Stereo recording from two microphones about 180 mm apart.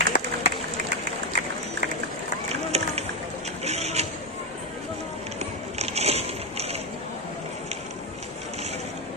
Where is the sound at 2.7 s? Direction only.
35° right (ahead or behind).